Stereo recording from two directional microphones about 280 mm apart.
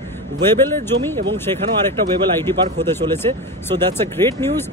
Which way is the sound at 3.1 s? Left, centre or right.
Centre.